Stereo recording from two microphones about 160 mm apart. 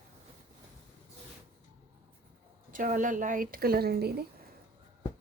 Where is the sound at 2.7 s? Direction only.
55° right (ahead or behind); by 4.2 s 80° right.